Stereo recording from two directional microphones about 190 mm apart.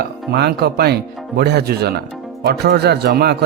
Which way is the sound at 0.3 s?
60° right (ahead or behind).